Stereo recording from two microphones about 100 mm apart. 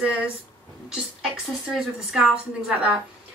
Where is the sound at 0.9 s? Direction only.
5° right (ahead or behind).